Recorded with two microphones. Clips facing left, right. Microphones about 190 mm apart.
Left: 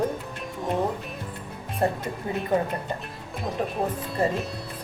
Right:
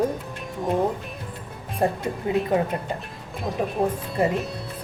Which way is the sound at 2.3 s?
15° right (ahead or behind).